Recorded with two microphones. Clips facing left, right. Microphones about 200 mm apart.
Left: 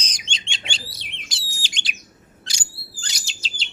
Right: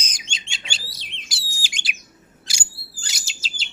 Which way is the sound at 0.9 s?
55° left (ahead or behind).